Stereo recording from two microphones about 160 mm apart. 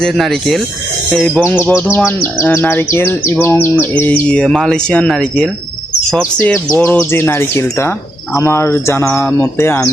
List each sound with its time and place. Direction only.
0.0 s speech: centre (ahead or behind)
1.5 s speech: 10° left (ahead or behind)
6.7 s speech: 10° left (ahead or behind)